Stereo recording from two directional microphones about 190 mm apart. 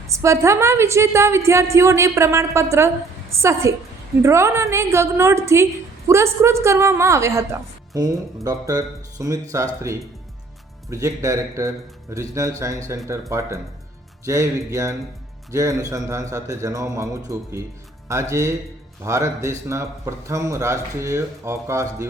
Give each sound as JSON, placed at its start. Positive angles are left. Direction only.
{"t": 0.1, "sound": "speech", "side_deg": -15}
{"t": 10.8, "sound": "speech", "side_deg": -15}